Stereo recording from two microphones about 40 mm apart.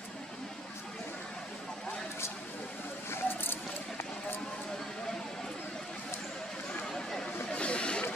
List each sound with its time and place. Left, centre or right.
3.1 s keys jangling: left
6.9 s chatter: centre
7.5 s a sound: left